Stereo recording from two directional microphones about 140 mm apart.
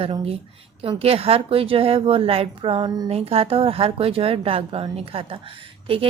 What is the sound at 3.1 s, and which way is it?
Speech, 45° right (ahead or behind).